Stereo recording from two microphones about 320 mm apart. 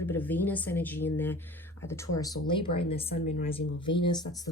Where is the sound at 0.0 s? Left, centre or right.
Centre.